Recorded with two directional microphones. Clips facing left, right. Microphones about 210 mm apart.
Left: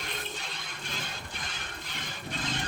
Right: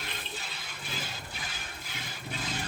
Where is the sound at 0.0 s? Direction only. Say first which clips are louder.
Left 2 dB; 5° right (ahead or behind).